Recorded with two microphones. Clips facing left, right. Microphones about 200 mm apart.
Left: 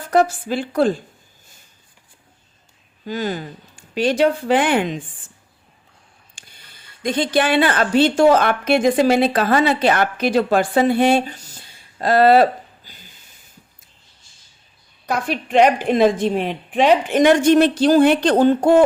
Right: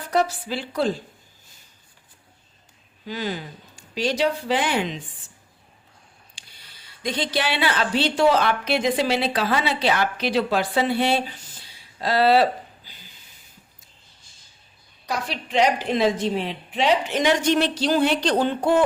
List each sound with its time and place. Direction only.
0.1 s a woman's voice: 50° left (ahead or behind)
3.1 s a woman's voice: 45° left (ahead or behind)
6.3 s speech: 50° left (ahead or behind)
15.0 s a woman's voice: 55° left (ahead or behind)